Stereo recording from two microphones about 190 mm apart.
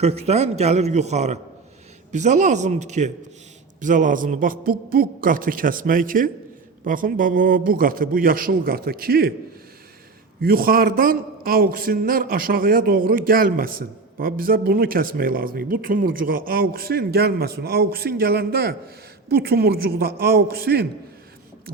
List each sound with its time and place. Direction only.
0.0 s a man's voice: 35° right (ahead or behind); by 9.3 s 50° right (ahead or behind)
10.4 s a man's voice: 50° right (ahead or behind)